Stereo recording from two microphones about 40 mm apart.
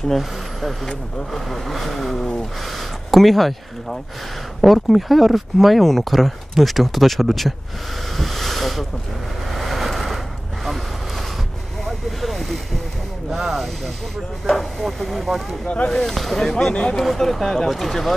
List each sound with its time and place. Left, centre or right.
0.1 s speech: centre
8.2 s a sound: centre
9.5 s vehicle: centre
11.8 s vehicle: centre
13.3 s speech: centre
15.6 s speech: left
15.9 s speech: centre